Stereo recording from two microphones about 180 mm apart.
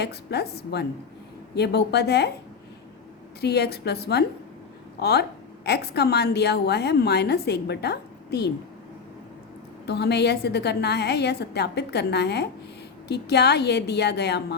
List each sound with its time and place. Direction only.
0.0 s a woman's voice: 65° left (ahead or behind)
3.4 s a woman's voice: 65° left (ahead or behind)
9.8 s a woman's voice: 70° left (ahead or behind)